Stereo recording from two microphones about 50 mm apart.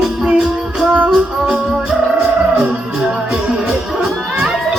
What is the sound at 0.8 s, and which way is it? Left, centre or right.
Music, right.